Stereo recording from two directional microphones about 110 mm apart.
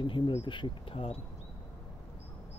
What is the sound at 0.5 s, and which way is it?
Speech, 50° left (ahead or behind).